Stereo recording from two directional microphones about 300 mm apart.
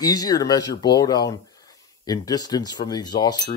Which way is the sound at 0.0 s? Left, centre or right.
Centre.